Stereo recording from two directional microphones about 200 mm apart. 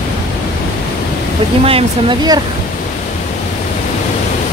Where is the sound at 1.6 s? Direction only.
25° right (ahead or behind).